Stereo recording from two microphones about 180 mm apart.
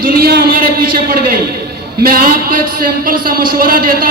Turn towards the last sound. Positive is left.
turn(degrees=-55)  # may be behind; listen again after turning